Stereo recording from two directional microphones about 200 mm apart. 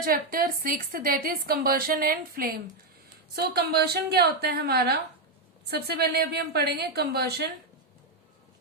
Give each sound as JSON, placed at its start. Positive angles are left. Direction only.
{"t": 0.0, "sound": "a woman's voice", "side_deg": -45}